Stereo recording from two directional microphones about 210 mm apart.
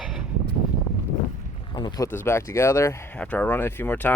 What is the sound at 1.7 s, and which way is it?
Speech, 20° left (ahead or behind).